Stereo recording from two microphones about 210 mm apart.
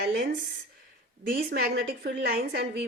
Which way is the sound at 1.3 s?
45° right (ahead or behind).